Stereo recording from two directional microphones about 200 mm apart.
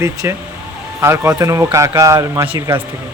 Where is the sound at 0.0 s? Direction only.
15° right (ahead or behind).